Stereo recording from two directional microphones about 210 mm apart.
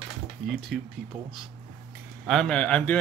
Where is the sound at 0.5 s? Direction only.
Centre (ahead or behind).